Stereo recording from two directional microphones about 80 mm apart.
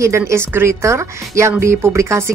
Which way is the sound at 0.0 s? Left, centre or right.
Right.